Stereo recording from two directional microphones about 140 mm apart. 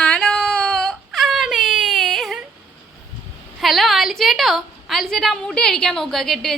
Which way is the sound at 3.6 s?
Centre (ahead or behind).